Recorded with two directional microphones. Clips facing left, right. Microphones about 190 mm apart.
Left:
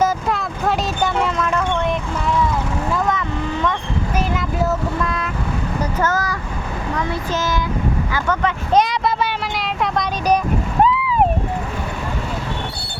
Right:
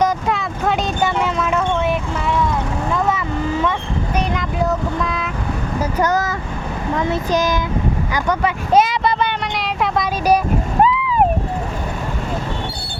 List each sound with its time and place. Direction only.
0.0 s vehicle: centre (ahead or behind)
5.8 s a sound: 15° right (ahead or behind)
6.9 s speech: 20° right (ahead or behind)
8.1 s vehicle: 10° right (ahead or behind)
10.8 s boat: centre (ahead or behind)